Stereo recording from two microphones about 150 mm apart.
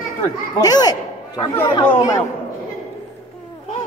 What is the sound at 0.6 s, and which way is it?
Speech, 25° left (ahead or behind).